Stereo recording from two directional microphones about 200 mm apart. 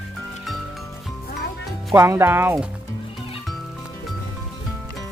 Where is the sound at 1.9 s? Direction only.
10° right (ahead or behind).